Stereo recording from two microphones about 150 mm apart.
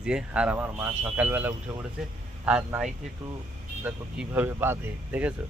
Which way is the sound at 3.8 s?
10° right (ahead or behind).